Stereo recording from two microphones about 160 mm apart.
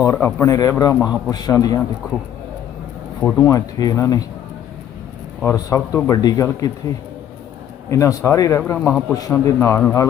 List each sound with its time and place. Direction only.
0.0 s speech: 20° left (ahead or behind)
0.9 s a man's voice: 5° right (ahead or behind)
1.3 s speech: 25° left (ahead or behind)
3.2 s speech: 10° left (ahead or behind)
3.4 s speech: 20° left (ahead or behind)
5.5 s speech: 20° left (ahead or behind)
7.9 s speech: 20° left (ahead or behind)
8.9 s a man's voice: centre (ahead or behind)
9.3 s speech: 15° left (ahead or behind)